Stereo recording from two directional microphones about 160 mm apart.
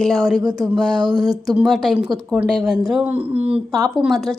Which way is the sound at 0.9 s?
25° right (ahead or behind).